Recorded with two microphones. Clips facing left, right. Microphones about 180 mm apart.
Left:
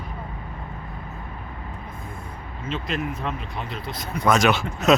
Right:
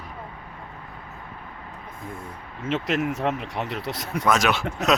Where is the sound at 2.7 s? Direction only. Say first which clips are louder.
Right 4 dB; 75° right (ahead or behind).